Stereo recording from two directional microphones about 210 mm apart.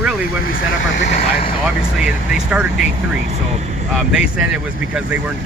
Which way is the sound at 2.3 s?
5° right (ahead or behind).